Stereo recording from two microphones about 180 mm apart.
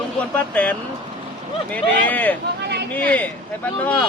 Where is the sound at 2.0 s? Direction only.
10° left (ahead or behind).